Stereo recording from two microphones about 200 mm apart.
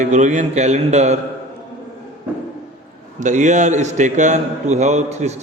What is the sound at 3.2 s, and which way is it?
A man's voice, 40° right (ahead or behind).